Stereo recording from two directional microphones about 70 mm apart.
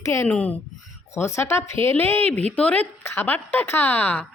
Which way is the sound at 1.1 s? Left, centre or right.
Left.